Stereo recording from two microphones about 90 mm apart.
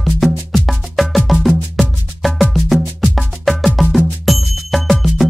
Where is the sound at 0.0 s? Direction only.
Centre (ahead or behind).